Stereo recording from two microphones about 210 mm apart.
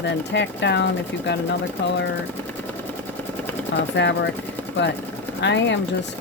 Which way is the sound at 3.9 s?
60° left (ahead or behind).